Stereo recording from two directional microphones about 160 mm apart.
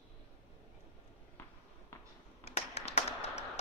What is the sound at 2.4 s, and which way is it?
Tap, 45° left (ahead or behind).